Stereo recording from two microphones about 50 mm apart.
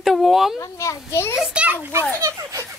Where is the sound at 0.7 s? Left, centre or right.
Left.